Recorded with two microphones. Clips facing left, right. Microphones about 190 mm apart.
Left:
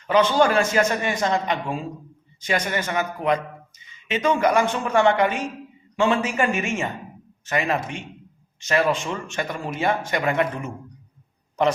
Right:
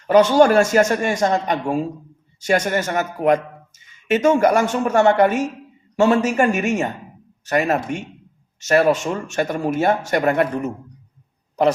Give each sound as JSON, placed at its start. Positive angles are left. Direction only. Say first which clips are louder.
{"t": 0.1, "sound": "speech", "louder": "right 6 dB", "side_deg": -45}